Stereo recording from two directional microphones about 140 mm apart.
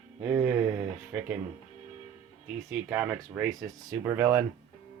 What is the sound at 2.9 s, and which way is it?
Speech, 15° right (ahead or behind).